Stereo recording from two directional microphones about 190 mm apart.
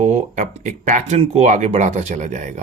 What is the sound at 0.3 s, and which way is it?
Speech, 40° right (ahead or behind).